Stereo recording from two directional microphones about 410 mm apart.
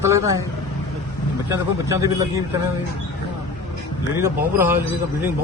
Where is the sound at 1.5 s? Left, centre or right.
Centre.